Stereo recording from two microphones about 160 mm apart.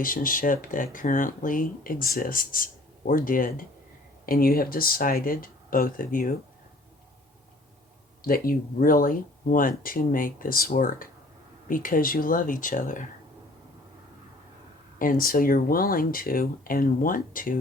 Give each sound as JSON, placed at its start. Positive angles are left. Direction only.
{"t": 0.0, "sound": "speech", "side_deg": 60}
{"t": 8.2, "sound": "speech", "side_deg": 65}
{"t": 14.9, "sound": "speech", "side_deg": 60}